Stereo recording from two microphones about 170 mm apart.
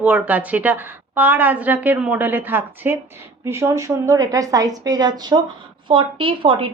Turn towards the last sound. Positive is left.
turn(degrees=-30)  # may be behind; listen again after turning